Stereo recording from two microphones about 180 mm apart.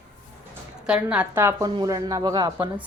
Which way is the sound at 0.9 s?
5° right (ahead or behind).